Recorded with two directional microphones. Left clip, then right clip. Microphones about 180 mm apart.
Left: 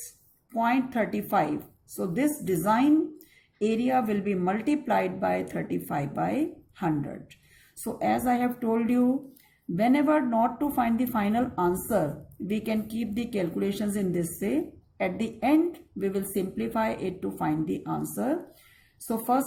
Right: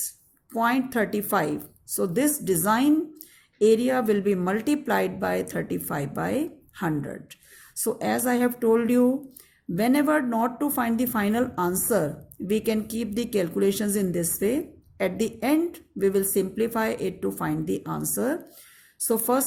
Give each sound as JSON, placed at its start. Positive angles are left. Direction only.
{"t": 0.5, "sound": "speech", "side_deg": -50}